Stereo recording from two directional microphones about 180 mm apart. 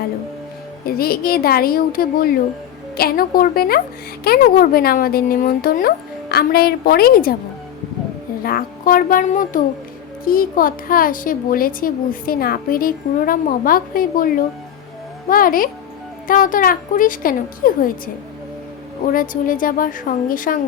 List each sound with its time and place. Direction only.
0.9 s speech: 55° left (ahead or behind)
8.4 s a woman's voice: 55° left (ahead or behind)
19.1 s a woman's voice: 50° left (ahead or behind)